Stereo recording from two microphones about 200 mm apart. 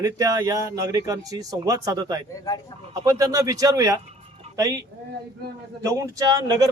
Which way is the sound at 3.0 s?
20° right (ahead or behind).